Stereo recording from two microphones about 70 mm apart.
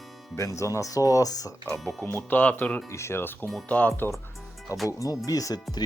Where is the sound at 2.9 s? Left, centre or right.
Left.